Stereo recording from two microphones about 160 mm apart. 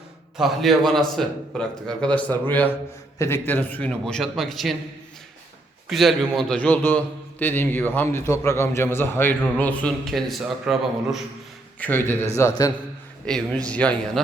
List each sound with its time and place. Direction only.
0.3 s a man's voice: centre (ahead or behind)
5.9 s a man's voice: centre (ahead or behind)
11.8 s a man's voice: 10° left (ahead or behind)
13.2 s a man's voice: 5° left (ahead or behind)